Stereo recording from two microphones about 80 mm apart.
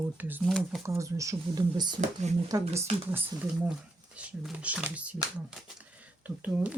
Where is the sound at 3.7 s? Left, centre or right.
Centre.